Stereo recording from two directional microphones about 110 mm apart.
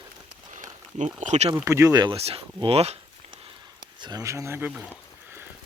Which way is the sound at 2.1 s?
65° right (ahead or behind).